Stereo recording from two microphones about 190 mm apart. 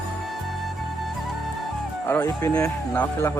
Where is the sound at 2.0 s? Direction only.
10° left (ahead or behind).